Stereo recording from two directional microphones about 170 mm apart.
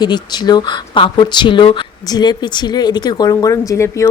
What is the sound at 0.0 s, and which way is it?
A woman's voice, 25° left (ahead or behind).